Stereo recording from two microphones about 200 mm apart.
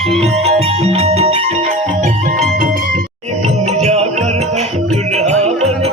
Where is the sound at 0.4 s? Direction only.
30° right (ahead or behind).